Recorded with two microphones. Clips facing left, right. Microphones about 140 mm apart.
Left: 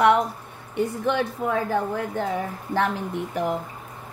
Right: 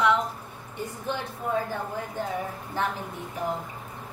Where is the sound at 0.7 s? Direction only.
70° left (ahead or behind).